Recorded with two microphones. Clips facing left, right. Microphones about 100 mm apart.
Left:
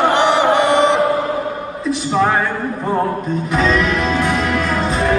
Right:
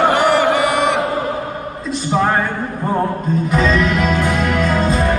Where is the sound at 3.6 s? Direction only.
Centre (ahead or behind).